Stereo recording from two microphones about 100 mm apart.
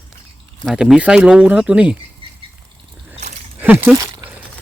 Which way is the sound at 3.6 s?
20° right (ahead or behind).